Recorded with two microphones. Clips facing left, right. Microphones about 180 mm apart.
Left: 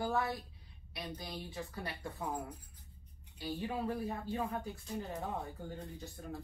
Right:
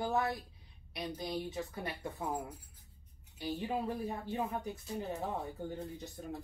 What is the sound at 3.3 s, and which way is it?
Speech, 20° right (ahead or behind).